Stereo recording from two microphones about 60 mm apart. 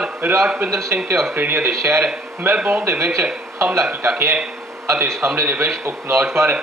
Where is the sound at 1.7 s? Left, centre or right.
Right.